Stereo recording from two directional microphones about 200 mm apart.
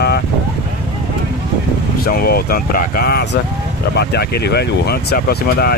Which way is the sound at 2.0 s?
50° left (ahead or behind).